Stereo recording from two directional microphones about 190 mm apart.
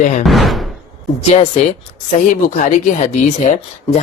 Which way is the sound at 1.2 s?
35° left (ahead or behind).